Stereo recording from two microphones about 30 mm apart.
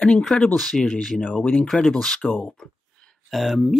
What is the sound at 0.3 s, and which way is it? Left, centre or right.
Speech, centre.